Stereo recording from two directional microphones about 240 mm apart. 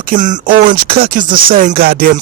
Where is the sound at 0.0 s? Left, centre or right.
Right.